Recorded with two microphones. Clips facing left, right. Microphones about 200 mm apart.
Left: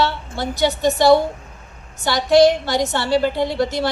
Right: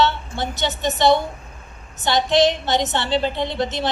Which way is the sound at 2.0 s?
20° right (ahead or behind).